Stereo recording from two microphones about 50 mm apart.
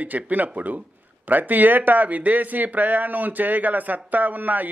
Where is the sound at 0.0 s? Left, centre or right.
Right.